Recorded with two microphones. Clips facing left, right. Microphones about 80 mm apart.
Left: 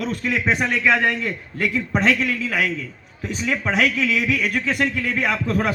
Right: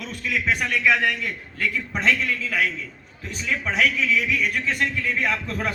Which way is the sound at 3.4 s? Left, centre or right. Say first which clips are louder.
Left 2 dB; left.